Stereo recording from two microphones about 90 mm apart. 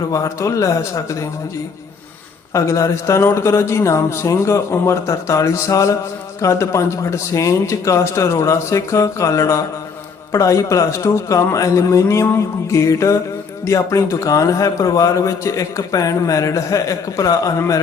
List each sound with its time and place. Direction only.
0.1 s a man's voice: 35° left (ahead or behind)
2.5 s a man's voice: 35° left (ahead or behind)